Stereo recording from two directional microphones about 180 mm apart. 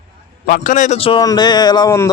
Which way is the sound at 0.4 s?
50° left (ahead or behind).